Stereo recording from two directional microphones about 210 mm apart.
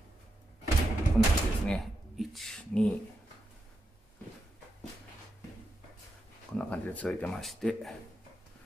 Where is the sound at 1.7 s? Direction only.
Centre (ahead or behind).